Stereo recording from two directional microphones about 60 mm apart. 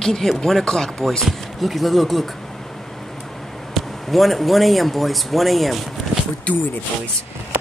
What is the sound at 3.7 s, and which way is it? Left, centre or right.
Speech, centre.